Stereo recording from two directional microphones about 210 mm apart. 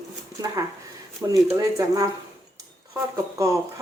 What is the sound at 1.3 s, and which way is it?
Speech, 15° right (ahead or behind).